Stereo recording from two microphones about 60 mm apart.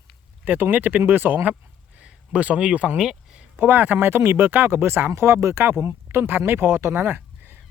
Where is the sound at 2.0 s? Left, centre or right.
Centre.